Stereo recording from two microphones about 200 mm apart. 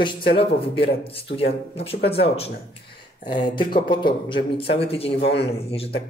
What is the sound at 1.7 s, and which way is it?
Speech, 30° left (ahead or behind).